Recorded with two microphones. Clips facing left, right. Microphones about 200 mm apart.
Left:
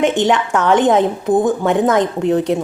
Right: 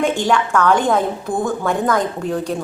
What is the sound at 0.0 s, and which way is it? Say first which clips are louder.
A woman's voice: left 3 dB; 20° left (ahead or behind).